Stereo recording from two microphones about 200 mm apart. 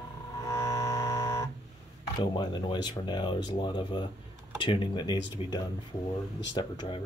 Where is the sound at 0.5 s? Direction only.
15° left (ahead or behind).